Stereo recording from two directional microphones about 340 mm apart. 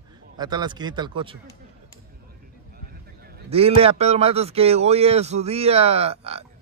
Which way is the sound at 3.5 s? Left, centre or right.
Centre.